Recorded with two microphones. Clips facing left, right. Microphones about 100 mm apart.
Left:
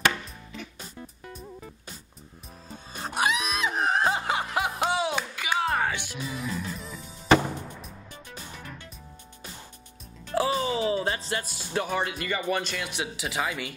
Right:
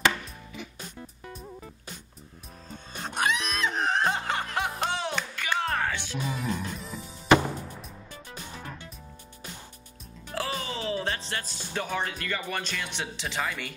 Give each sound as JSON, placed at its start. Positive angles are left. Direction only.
{"t": 3.0, "sound": "music", "side_deg": 5}
{"t": 6.2, "sound": "speech", "side_deg": -45}
{"t": 10.3, "sound": "speech", "side_deg": 15}